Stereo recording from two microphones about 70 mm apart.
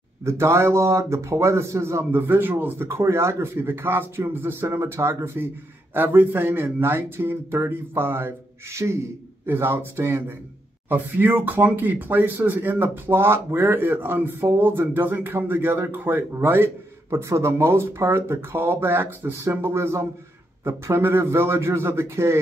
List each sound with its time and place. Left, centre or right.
0.2 s speech: right